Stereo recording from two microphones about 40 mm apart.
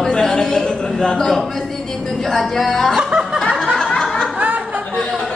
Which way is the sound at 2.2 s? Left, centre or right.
Centre.